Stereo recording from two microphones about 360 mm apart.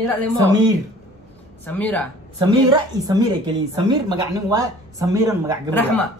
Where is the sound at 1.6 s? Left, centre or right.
Centre.